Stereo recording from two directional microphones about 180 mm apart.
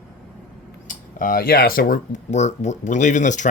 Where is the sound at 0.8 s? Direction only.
50° left (ahead or behind).